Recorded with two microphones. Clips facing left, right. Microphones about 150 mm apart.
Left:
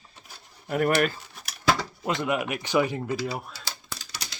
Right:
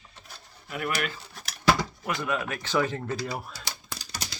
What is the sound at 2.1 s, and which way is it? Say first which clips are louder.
Speech: left 4 dB; 20° left (ahead or behind).